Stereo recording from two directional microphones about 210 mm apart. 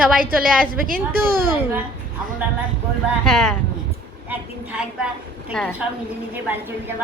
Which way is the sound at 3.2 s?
Centre (ahead or behind).